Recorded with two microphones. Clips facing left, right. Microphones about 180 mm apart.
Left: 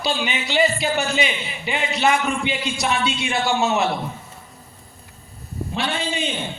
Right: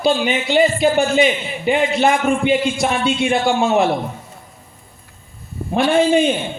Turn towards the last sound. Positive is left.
turn(degrees=-50)  # may be behind; listen again after turning